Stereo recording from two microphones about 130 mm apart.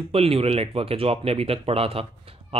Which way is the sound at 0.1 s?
50° right (ahead or behind).